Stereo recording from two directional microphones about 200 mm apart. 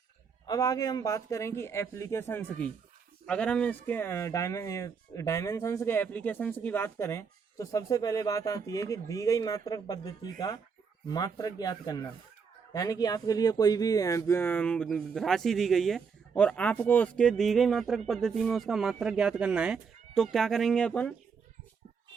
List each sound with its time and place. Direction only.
0.4 s speech: 20° left (ahead or behind)